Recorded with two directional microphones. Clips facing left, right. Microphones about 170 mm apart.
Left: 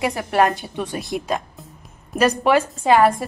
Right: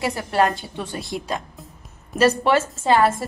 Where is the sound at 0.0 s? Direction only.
20° left (ahead or behind).